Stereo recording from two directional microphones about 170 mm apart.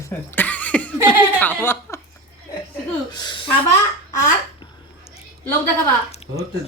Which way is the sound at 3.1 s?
25° left (ahead or behind).